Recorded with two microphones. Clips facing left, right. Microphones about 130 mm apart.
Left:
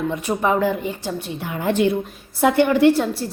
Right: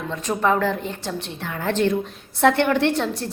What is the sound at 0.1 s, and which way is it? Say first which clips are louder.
A woman's voice: right 4 dB; 15° left (ahead or behind).